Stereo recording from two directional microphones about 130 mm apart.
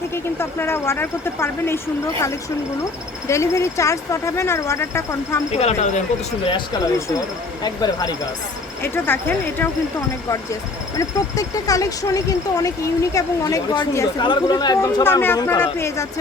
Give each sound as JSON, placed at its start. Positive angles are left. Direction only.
{"t": 0.1, "sound": "speech", "side_deg": 20}
{"t": 5.5, "sound": "speech", "side_deg": 55}
{"t": 7.6, "sound": "speech", "side_deg": 30}
{"t": 8.8, "sound": "speech", "side_deg": 15}